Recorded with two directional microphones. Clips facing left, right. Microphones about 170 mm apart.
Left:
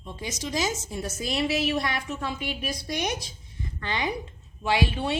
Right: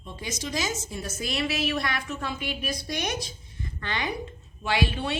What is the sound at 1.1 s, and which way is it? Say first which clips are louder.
A woman's voice: left 3 dB; 20° left (ahead or behind).